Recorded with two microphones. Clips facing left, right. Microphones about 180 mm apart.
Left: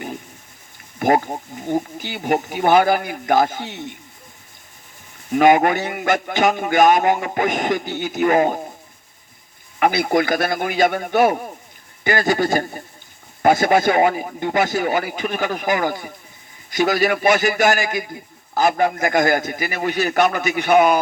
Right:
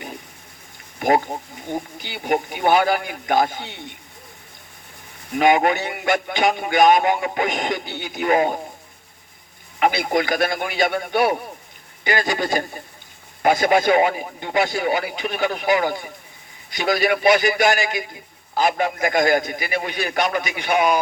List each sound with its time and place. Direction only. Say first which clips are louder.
0.9 s a man's voice: left 1 dB; 45° left (ahead or behind)
5.3 s a man's voice: left 3 dB; 45° left (ahead or behind)
9.8 s a man's voice: left 2 dB; 45° left (ahead or behind)